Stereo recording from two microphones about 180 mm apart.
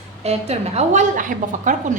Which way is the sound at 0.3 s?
35° right (ahead or behind).